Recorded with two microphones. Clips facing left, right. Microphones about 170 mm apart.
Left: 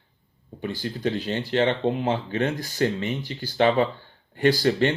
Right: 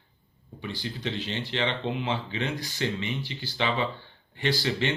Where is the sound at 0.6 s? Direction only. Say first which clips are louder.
Left 6 dB; 45° left (ahead or behind).